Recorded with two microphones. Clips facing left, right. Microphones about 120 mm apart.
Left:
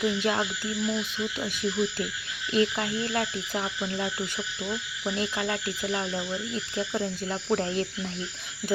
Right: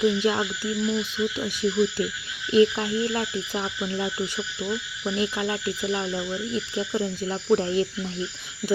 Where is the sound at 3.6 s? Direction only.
5° right (ahead or behind).